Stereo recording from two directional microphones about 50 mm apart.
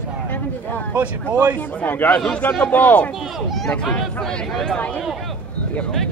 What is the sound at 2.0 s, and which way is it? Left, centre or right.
A man's voice, left.